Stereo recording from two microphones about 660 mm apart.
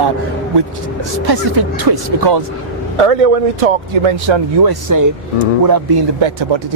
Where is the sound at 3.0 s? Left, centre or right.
Right.